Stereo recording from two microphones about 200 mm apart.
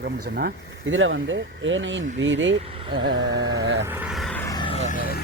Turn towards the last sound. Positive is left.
turn(degrees=45)  # may be behind; listen again after turning